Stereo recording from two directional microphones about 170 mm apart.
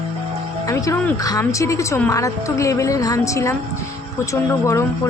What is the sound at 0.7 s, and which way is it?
Speech, 20° left (ahead or behind).